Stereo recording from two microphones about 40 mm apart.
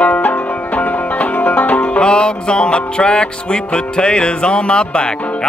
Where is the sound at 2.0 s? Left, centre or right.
Left.